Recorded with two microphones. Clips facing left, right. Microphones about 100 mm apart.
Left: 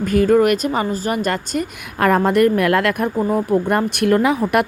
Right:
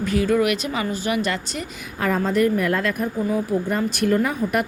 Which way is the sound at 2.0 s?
65° left (ahead or behind).